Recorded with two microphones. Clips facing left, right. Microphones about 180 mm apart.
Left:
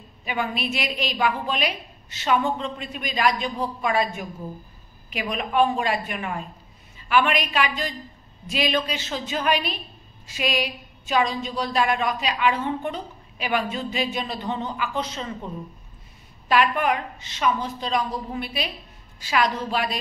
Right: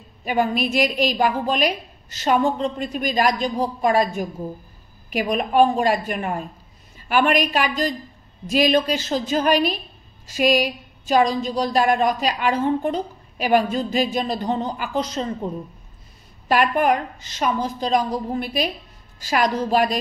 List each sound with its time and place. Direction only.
0.2 s a woman's voice: 40° right (ahead or behind)
16.4 s a woman's voice: 45° right (ahead or behind)